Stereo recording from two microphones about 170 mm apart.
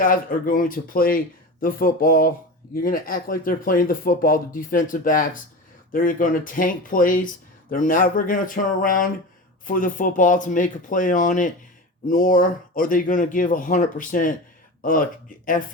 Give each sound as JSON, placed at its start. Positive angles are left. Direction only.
{"t": 0.0, "sound": "speech", "side_deg": 55}